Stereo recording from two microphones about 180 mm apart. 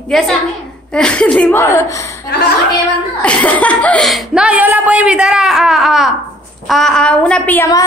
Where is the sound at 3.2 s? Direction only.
10° left (ahead or behind).